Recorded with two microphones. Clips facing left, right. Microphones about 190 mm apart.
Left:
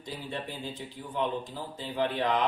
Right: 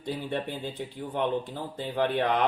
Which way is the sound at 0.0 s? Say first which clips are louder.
Right 6 dB; 60° right (ahead or behind).